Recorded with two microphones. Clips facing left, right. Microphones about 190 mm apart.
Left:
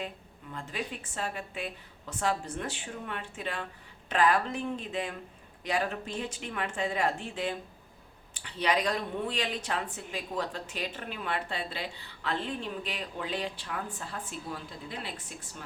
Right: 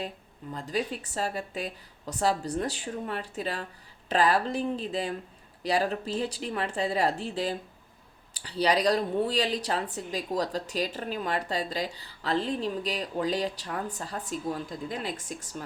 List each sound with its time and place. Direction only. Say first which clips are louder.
0.5 s speech: right 6 dB; 35° right (ahead or behind)